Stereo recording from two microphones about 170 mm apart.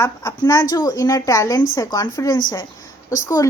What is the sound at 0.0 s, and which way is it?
A child's voice, 20° left (ahead or behind).